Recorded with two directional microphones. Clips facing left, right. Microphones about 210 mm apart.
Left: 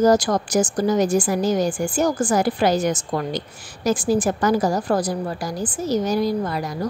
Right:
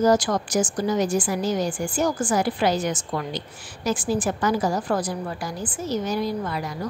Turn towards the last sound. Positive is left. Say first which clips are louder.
# left 4 dB
turn(degrees=40)  # may be behind; listen again after turning